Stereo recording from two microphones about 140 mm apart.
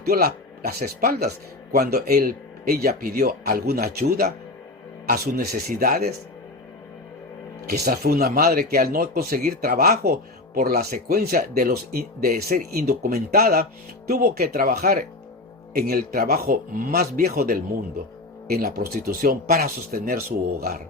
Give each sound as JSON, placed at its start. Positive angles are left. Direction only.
{"t": 0.0, "sound": "speech", "side_deg": -90}
{"t": 7.7, "sound": "speech", "side_deg": -90}